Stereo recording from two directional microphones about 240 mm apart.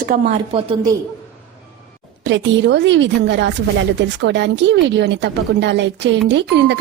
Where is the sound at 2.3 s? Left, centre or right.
Right.